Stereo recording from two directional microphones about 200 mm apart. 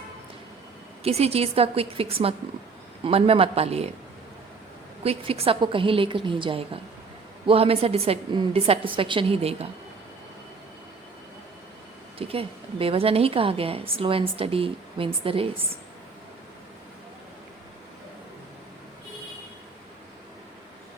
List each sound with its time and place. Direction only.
1.0 s a woman's voice: 30° right (ahead or behind)
5.0 s a woman's voice: 30° right (ahead or behind)
12.3 s a woman's voice: 30° right (ahead or behind)